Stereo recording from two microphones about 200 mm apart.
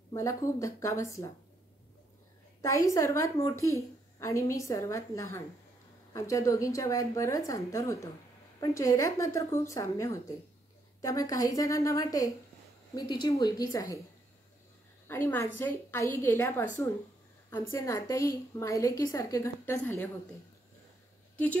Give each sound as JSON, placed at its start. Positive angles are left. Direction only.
{"t": 0.1, "sound": "a woman's voice", "side_deg": 15}
{"t": 2.6, "sound": "a woman's voice", "side_deg": 15}
{"t": 15.0, "sound": "a woman's voice", "side_deg": 10}